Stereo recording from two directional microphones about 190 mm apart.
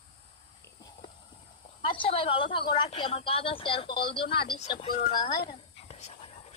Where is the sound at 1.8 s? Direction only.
25° left (ahead or behind).